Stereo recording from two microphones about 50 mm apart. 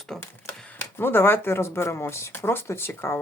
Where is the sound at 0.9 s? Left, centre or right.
Left.